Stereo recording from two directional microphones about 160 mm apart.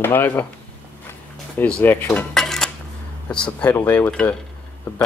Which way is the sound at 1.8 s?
10° left (ahead or behind).